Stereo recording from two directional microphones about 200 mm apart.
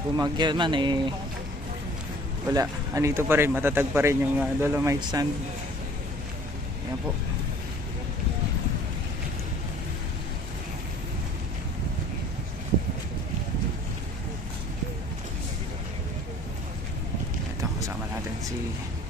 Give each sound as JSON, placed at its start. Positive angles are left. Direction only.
{"t": 0.2, "sound": "speech", "side_deg": -20}
{"t": 2.5, "sound": "speech", "side_deg": -15}